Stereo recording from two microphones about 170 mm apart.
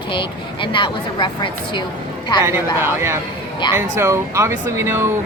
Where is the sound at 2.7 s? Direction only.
15° right (ahead or behind).